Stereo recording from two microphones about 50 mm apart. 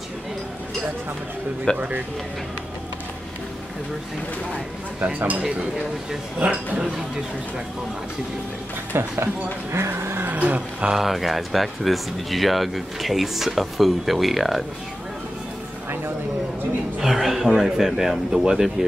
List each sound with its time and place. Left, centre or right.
1.7 s speech: centre
5.0 s speech: right
6.4 s speech: right
8.9 s speech: right
10.3 s speech: right
10.9 s speech: centre
17.0 s speech: centre